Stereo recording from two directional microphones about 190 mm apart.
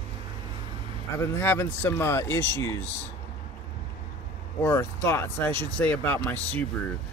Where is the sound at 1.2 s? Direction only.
10° left (ahead or behind).